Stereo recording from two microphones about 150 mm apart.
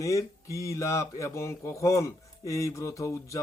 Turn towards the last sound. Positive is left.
turn(degrees=20)  # may be behind; listen again after turning